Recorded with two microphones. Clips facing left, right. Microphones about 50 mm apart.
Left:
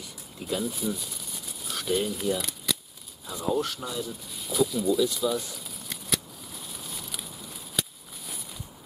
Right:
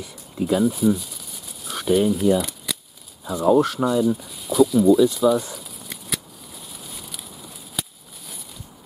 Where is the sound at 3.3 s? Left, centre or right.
Right.